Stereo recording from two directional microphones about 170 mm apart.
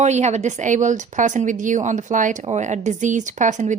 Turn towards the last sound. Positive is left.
turn(degrees=-45)  # may be behind; listen again after turning